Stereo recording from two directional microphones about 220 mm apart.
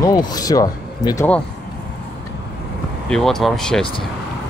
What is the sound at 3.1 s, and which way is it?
Speech, centre (ahead or behind).